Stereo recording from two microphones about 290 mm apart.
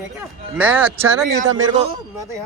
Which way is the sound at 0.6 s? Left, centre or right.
Centre.